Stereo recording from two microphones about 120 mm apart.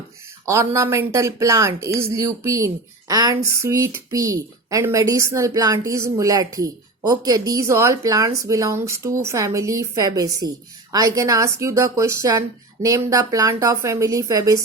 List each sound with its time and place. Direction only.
0.4 s speech: 25° right (ahead or behind)